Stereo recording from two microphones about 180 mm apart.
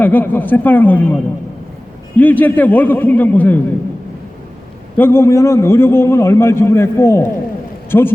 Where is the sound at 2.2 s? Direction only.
10° left (ahead or behind).